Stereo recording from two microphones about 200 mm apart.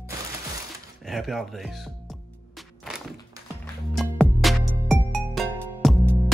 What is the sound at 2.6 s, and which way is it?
Music, centre (ahead or behind).